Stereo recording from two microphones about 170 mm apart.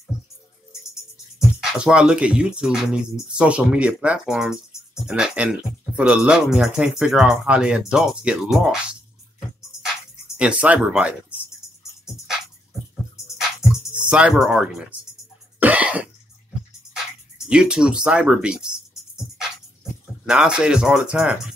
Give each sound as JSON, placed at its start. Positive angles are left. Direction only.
{"t": 1.6, "sound": "speech", "side_deg": -5}
{"t": 10.3, "sound": "speech", "side_deg": -5}
{"t": 14.0, "sound": "speech", "side_deg": -5}
{"t": 15.6, "sound": "cough", "side_deg": -10}
{"t": 17.5, "sound": "speech", "side_deg": -5}
{"t": 20.2, "sound": "speech", "side_deg": -5}